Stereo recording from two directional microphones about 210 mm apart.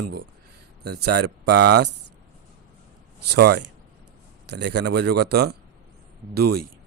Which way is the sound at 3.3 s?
50° right (ahead or behind).